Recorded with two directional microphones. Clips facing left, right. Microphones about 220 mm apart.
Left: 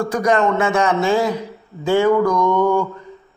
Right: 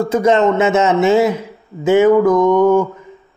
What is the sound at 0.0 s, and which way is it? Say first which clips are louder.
Speech: right 4 dB; 25° right (ahead or behind).